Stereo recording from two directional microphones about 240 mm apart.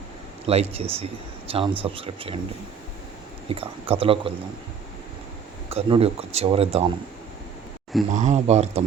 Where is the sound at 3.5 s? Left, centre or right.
Right.